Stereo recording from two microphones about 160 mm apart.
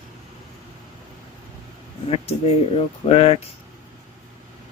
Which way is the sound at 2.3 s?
40° left (ahead or behind).